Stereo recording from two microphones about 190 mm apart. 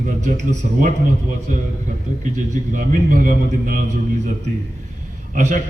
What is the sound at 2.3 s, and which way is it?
A man's voice, 40° right (ahead or behind).